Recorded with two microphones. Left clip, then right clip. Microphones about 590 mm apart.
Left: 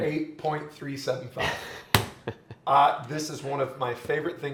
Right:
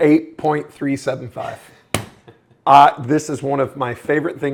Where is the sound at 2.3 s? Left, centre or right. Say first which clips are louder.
Left 9 dB; left.